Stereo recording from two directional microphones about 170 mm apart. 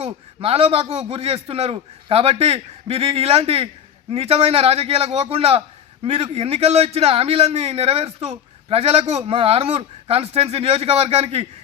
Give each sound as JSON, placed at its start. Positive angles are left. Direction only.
{"t": 0.0, "sound": "a man's voice", "side_deg": -35}